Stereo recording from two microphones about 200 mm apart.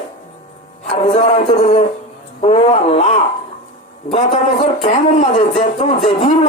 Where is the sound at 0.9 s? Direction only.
30° left (ahead or behind).